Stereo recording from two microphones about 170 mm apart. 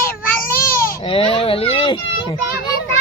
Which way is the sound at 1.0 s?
30° left (ahead or behind).